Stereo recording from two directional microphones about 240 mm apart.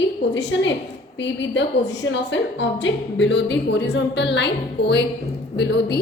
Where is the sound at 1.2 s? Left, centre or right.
Left.